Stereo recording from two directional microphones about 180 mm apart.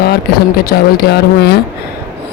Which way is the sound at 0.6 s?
55° left (ahead or behind).